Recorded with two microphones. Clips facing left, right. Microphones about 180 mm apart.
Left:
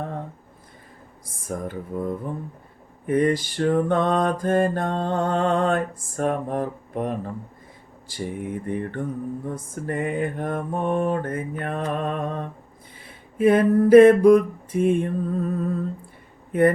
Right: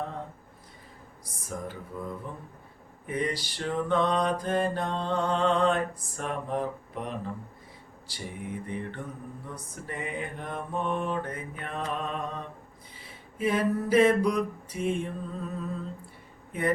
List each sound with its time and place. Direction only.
1.5 s mantra: 50° left (ahead or behind)
16.5 s speech: 50° left (ahead or behind)